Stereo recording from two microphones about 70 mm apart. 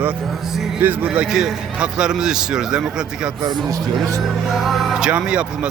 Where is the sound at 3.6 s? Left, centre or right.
Right.